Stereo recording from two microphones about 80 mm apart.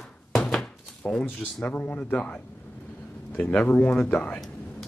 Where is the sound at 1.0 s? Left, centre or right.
Centre.